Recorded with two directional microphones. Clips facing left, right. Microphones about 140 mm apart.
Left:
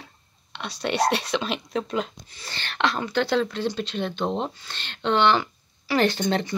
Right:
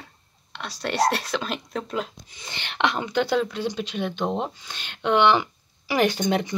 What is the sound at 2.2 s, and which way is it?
Speech, 15° right (ahead or behind).